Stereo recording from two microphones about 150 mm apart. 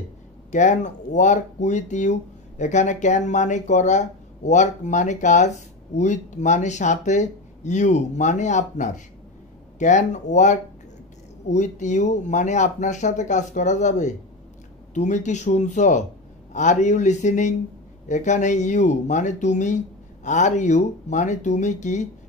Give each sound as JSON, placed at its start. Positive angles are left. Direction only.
{"t": 0.5, "sound": "speech", "side_deg": 50}